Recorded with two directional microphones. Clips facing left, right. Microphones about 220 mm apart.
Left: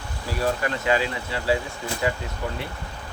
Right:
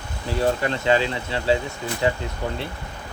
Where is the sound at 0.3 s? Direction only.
25° right (ahead or behind).